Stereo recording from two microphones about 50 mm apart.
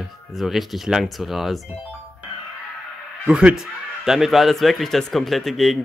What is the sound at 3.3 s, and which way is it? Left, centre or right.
Speech, centre.